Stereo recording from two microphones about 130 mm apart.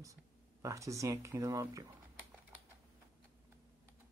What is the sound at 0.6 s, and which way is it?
Speech, 25° right (ahead or behind).